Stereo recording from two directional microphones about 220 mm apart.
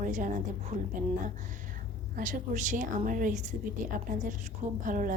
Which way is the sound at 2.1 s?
35° right (ahead or behind).